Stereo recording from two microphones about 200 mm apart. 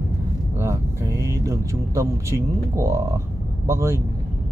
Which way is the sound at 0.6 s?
15° right (ahead or behind).